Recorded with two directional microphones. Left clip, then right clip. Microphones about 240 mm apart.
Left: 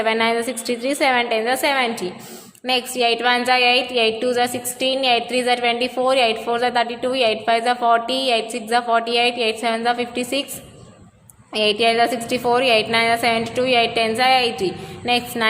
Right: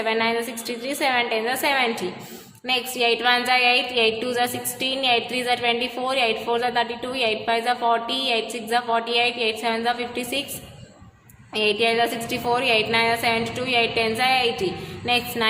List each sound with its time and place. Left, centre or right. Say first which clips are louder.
0.0 s a woman's voice: left 4 dB; left
11.5 s a woman's voice: left 3 dB; left